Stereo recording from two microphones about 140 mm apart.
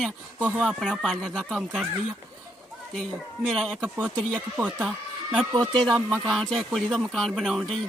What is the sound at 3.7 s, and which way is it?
Speech, 10° right (ahead or behind).